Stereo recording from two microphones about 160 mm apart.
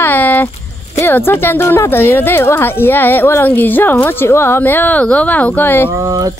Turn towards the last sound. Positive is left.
turn(degrees=-20)  # may be behind; listen again after turning